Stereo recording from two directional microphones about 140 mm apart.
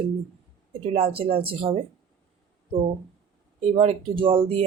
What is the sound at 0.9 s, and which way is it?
Speech, 40° right (ahead or behind).